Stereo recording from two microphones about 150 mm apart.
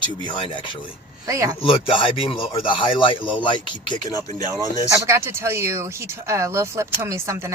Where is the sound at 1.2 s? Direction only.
20° right (ahead or behind).